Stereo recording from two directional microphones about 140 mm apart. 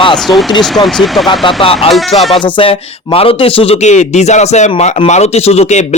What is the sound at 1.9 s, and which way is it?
A man's voice, 45° left (ahead or behind).